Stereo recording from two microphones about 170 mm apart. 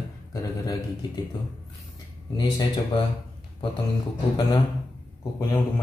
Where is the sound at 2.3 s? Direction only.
25° left (ahead or behind).